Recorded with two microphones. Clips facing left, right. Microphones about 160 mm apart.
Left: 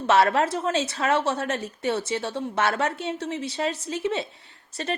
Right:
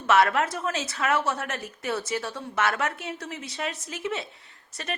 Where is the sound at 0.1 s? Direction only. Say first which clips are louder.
Left 2 dB; 30° left (ahead or behind).